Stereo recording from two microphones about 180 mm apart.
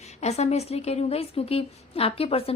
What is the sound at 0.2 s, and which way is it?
A woman's voice, 40° left (ahead or behind).